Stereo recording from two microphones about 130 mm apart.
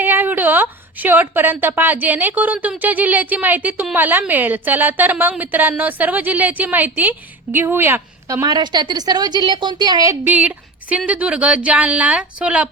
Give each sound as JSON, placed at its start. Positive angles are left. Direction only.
{"t": 0.0, "sound": "a woman's voice", "side_deg": -15}
{"t": 10.2, "sound": "a woman's voice", "side_deg": -10}